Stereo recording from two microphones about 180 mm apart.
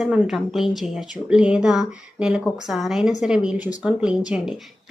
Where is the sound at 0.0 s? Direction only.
Centre (ahead or behind).